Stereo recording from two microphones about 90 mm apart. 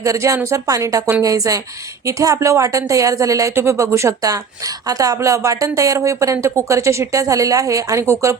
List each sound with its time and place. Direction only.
0.0 s speech: 40° right (ahead or behind)